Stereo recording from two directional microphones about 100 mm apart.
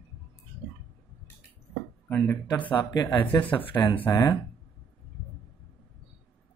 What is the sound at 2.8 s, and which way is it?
Speech, 40° left (ahead or behind).